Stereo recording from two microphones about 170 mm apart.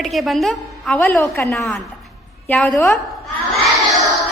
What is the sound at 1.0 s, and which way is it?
Speech, 10° left (ahead or behind).